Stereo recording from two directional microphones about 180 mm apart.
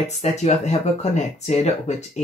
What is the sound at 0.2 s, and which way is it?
Speech, 40° left (ahead or behind).